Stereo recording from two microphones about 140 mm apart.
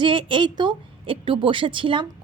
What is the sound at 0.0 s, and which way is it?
A woman's voice, 35° right (ahead or behind).